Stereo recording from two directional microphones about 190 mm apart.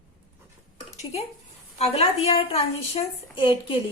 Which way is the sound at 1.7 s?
35° left (ahead or behind).